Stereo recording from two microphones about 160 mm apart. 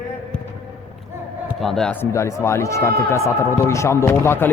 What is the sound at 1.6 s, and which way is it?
Speech, 5° left (ahead or behind).